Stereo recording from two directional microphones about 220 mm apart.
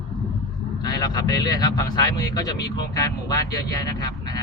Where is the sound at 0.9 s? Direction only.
15° left (ahead or behind).